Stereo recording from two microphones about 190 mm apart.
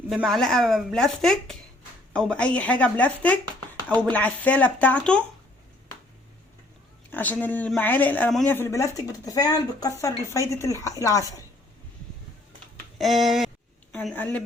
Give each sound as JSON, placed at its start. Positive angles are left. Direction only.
{"t": 0.1, "sound": "speech", "side_deg": 0}
{"t": 7.1, "sound": "speech", "side_deg": 10}
{"t": 13.0, "sound": "speech", "side_deg": 0}